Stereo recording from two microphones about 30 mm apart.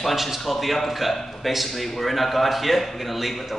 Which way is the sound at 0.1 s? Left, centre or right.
Centre.